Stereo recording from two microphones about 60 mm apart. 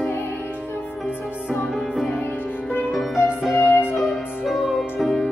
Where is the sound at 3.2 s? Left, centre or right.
Left.